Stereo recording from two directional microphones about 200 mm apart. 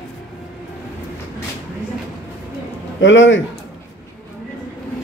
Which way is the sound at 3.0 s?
70° left (ahead or behind).